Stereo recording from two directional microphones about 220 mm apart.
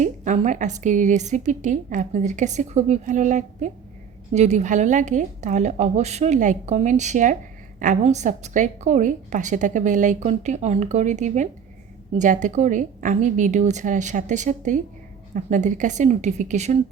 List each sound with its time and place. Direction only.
0.0 s a woman's voice: 35° right (ahead or behind)